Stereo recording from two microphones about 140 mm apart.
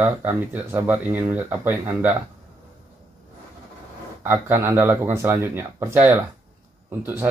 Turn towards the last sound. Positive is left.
turn(degrees=-15)  # may be behind; listen again after turning